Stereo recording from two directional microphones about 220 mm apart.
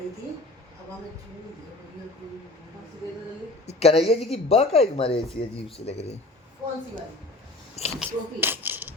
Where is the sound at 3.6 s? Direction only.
30° left (ahead or behind).